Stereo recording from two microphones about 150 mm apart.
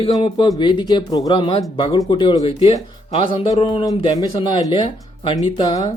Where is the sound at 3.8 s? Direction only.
25° left (ahead or behind).